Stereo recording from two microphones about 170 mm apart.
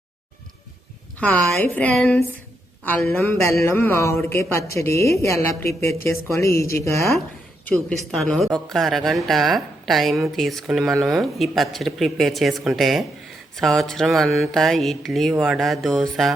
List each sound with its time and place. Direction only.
1.2 s speech: 10° left (ahead or behind)
7.6 s a woman's voice: 5° left (ahead or behind)